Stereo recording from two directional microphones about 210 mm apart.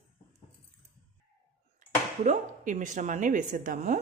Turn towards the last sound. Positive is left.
turn(degrees=-40)  # may be behind; listen again after turning